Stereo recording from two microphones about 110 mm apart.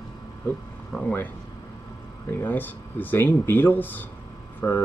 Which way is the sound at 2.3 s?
15° left (ahead or behind).